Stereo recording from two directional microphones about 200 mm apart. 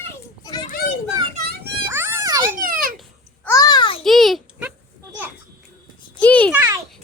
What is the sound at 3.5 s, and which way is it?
Speech, 20° left (ahead or behind).